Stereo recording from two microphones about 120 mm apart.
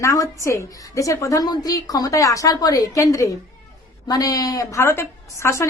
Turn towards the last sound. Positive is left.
turn(degrees=25)  # may be behind; listen again after turning